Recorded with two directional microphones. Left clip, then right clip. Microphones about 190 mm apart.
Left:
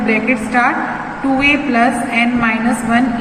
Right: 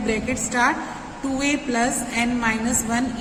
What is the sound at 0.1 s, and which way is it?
A woman's voice, 60° right (ahead or behind).